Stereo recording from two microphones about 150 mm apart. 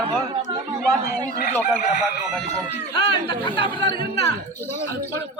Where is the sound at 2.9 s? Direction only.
35° left (ahead or behind).